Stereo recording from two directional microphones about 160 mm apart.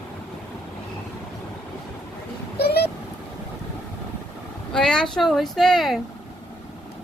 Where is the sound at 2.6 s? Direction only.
80° left.